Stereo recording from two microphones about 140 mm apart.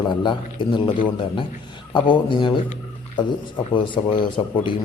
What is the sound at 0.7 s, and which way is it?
A man's voice, 35° left (ahead or behind).